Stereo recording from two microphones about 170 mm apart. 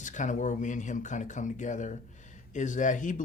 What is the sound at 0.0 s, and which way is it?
Speech, 45° left (ahead or behind).